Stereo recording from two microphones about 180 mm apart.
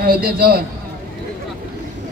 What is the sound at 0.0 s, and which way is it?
Speech, 55° right (ahead or behind).